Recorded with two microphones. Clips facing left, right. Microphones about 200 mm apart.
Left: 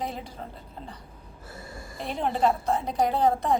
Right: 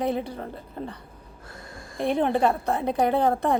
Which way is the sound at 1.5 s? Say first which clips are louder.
Left 1 dB; 5° left (ahead or behind).